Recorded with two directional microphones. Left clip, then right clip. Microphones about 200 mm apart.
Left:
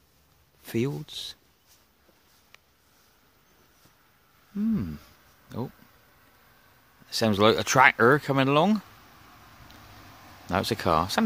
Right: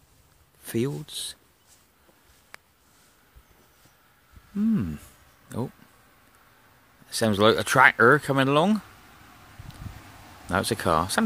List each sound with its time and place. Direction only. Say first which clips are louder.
0.7 s speech: right 1 dB; 10° left (ahead or behind)
4.6 s a sound: right 3 dB; 5° right (ahead or behind)
7.1 s speech: right 1 dB; 10° left (ahead or behind)
10.5 s speech: right 1 dB; 10° left (ahead or behind)